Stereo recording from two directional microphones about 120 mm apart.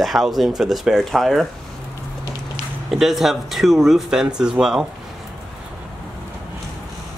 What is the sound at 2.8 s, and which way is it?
Speech, centre (ahead or behind).